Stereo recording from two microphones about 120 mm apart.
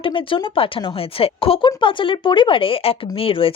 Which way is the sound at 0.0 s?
45° left (ahead or behind).